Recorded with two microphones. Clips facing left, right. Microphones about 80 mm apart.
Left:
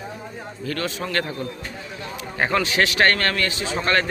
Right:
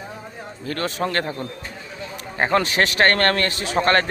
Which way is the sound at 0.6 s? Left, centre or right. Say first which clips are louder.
Right 3 dB; right.